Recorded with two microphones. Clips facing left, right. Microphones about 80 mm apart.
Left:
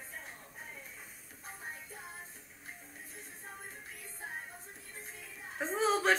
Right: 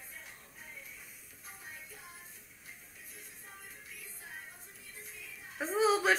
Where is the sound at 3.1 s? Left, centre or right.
Left.